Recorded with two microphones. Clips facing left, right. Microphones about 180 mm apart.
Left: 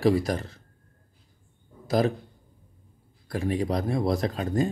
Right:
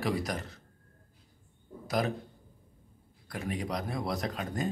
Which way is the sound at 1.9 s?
30° left (ahead or behind).